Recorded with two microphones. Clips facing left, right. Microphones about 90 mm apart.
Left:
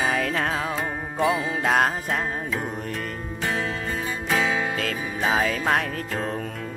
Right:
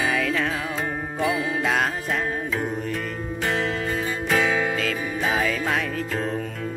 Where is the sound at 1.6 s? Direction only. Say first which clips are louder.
Left 2 dB; 45° left (ahead or behind).